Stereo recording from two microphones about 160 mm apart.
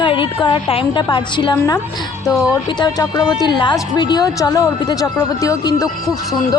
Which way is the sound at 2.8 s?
25° left (ahead or behind).